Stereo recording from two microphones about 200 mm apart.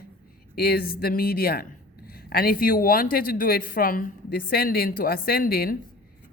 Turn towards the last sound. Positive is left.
turn(degrees=50)  # may be behind; listen again after turning